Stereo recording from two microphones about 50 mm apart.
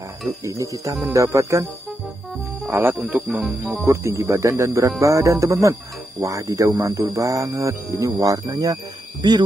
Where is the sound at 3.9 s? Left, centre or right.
Right.